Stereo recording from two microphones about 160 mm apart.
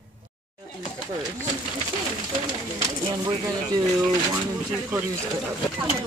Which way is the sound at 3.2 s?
20° right (ahead or behind).